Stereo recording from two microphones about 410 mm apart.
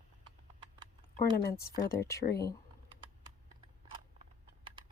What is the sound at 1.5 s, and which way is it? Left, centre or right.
Speech, centre.